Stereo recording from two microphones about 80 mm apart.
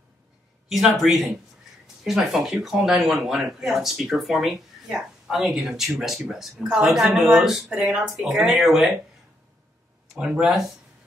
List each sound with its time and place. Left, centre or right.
0.7 s speech: centre
10.1 s speech: centre